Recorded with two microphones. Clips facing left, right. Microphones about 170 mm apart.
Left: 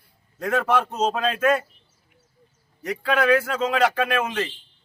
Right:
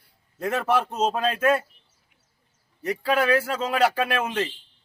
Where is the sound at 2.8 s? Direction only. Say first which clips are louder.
Left 2 dB; 30° right (ahead or behind).